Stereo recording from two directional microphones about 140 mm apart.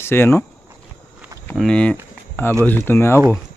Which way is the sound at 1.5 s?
5° left (ahead or behind).